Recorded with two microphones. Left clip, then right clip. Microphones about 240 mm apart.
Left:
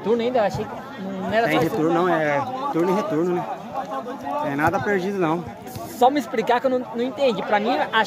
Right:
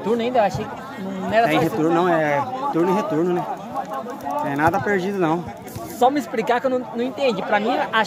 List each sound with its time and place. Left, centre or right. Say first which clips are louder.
0.1 s speech: right 1 dB; centre
1.4 s speech: right 2 dB; centre
3.9 s a sound: even; left
4.5 s speech: right 2 dB; centre
5.9 s speech: even; centre